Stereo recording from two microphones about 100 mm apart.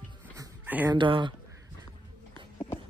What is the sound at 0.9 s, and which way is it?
Speech, 50° right (ahead or behind).